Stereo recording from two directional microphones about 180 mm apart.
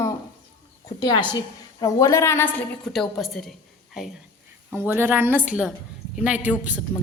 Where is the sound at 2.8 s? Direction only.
Centre (ahead or behind).